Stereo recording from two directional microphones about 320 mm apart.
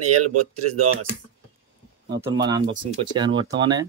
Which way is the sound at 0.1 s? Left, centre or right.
Right.